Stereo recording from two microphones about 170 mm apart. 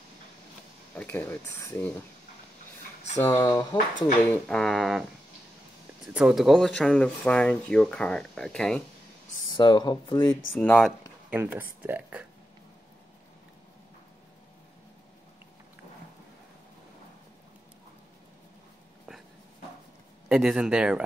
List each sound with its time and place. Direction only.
0.9 s speech: 10° left (ahead or behind)
3.2 s speech: 15° left (ahead or behind)
4.3 s speech: 5° left (ahead or behind)
6.1 s speech: 5° right (ahead or behind)
9.5 s speech: 25° left (ahead or behind)
10.5 s speech: 10° left (ahead or behind)
11.2 s speech: 10° right (ahead or behind)
20.2 s speech: 5° right (ahead or behind)